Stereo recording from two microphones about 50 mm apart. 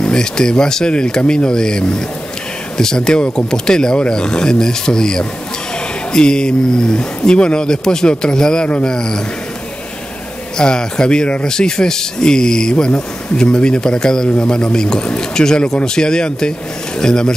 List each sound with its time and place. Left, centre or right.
0.0 s speech: centre
10.6 s speech: centre